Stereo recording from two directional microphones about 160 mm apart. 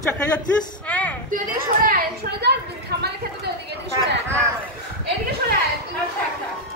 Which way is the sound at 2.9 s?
90° right.